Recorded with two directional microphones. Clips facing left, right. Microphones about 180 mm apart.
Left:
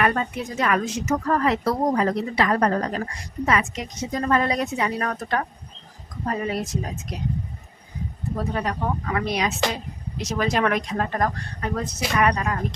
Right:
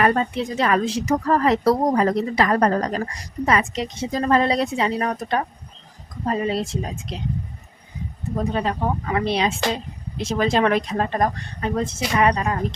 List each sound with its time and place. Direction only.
0.0 s a woman's voice: 30° right (ahead or behind)
8.4 s speech: 25° right (ahead or behind)